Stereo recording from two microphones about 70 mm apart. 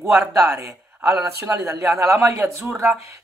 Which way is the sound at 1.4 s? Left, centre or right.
Right.